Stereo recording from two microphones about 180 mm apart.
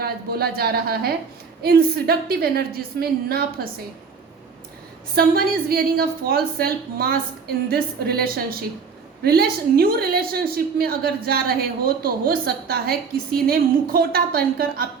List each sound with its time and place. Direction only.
0.0 s a woman's voice: 60° right (ahead or behind)
5.1 s a woman's voice: 55° right (ahead or behind)